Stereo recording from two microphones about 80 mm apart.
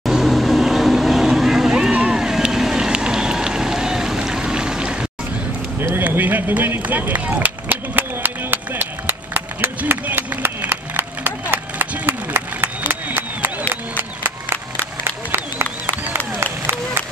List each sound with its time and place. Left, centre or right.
0.0 s vehicle: centre
5.8 s run: right
13.9 s a sound: right